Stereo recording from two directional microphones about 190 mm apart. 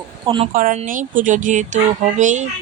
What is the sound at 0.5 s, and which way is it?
Speech, 45° right (ahead or behind).